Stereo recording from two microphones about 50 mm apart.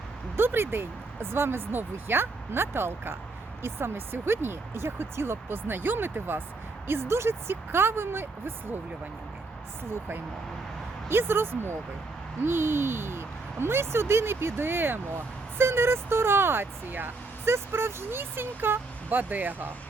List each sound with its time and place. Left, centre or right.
0.3 s speech: right
11.1 s speech: right
17.5 s speech: right